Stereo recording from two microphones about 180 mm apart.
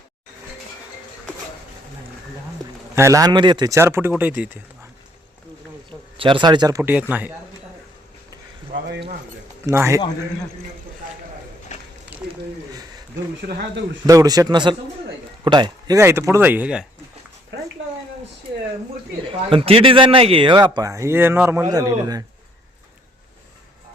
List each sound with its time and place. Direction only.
2.9 s speech: 15° right (ahead or behind)
6.1 s speech: 25° right (ahead or behind); by 7.3 s 10° right (ahead or behind)
8.7 s speech: 75° right (ahead or behind)
9.6 s speech: 15° right (ahead or behind)
11.7 s a sound: 40° left (ahead or behind)
14.1 s speech: 20° right (ahead or behind)
19.3 s speech: 30° right (ahead or behind)